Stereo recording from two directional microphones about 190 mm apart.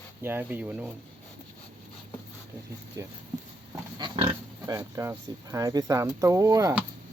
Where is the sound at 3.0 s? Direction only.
20° right (ahead or behind).